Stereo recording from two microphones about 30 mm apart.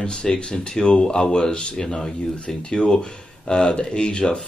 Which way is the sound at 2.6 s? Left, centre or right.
Left.